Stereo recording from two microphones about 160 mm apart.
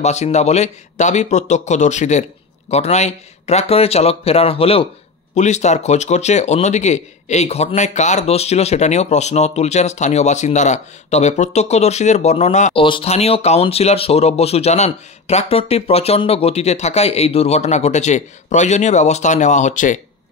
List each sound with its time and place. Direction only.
0.0 s speech: 45° left (ahead or behind)
12.7 s speech: 35° left (ahead or behind); by 20.0 s 50° left (ahead or behind)